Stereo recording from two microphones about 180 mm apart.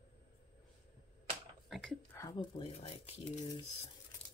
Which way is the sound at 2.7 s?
35° left (ahead or behind).